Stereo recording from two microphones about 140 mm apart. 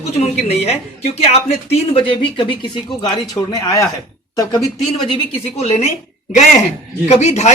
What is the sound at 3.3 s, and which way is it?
A man's voice, 25° left (ahead or behind).